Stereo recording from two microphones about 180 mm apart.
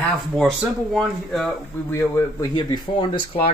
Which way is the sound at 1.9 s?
15° left (ahead or behind).